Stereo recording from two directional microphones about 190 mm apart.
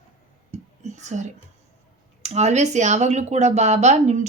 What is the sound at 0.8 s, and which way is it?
Speech, 40° right (ahead or behind).